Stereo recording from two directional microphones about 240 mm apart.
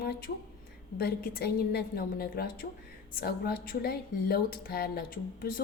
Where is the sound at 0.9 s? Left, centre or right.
Left.